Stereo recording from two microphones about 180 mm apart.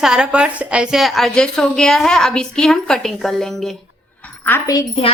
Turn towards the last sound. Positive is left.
turn(degrees=15)  # may be behind; listen again after turning